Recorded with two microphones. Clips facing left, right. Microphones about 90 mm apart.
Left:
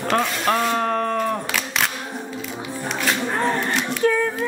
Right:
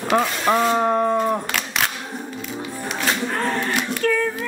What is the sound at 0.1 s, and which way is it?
Speech, 5° right (ahead or behind).